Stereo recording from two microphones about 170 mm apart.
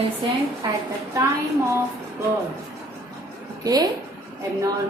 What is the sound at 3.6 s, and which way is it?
Speech, 20° right (ahead or behind).